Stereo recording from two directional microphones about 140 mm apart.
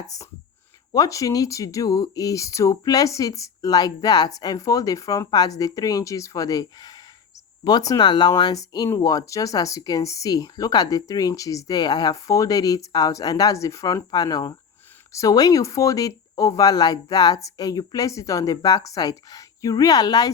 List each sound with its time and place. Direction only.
0.9 s speech: 25° left (ahead or behind)